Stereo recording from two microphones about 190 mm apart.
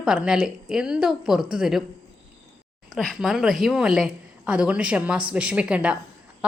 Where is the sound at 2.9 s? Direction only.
Centre (ahead or behind).